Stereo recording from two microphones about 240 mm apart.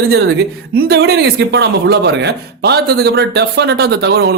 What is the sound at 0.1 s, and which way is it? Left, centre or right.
Speech, right.